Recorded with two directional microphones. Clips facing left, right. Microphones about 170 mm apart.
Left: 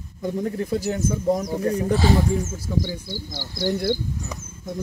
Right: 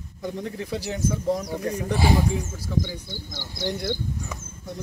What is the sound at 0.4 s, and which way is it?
Speech, 45° left (ahead or behind).